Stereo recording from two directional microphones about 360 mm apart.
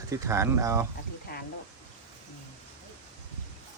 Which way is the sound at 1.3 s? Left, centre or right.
Left.